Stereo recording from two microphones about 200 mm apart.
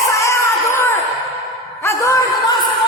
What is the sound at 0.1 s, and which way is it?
Music, 15° left (ahead or behind).